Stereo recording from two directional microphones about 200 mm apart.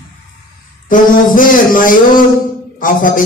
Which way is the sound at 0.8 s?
45° left (ahead or behind).